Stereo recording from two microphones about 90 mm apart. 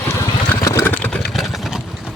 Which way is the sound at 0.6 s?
35° left (ahead or behind).